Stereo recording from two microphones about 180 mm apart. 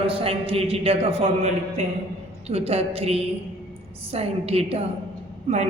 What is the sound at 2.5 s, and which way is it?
A man's voice, 35° right (ahead or behind).